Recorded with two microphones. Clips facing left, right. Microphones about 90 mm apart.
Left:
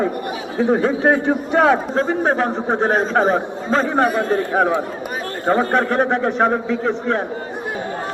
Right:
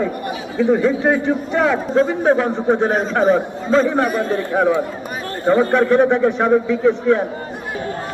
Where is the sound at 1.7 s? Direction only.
35° left (ahead or behind).